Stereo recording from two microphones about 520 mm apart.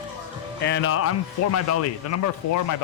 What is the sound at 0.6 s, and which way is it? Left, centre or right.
Speech, centre.